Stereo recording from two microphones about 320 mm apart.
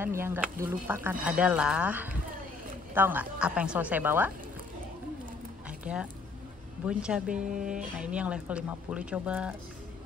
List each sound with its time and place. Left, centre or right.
0.0 s speech: centre
5.7 s a sound: centre
6.9 s speech: centre
7.3 s speech: right
8.0 s speech: centre